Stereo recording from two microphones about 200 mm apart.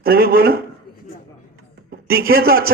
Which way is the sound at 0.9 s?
45° left (ahead or behind).